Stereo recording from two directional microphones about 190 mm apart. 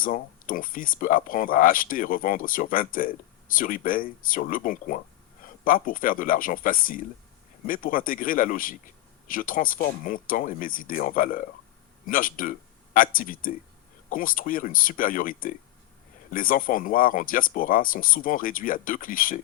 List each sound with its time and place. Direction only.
0.0 s speech: 45° left (ahead or behind)